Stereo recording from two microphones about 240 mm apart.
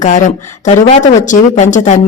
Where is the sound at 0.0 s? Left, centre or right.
Left.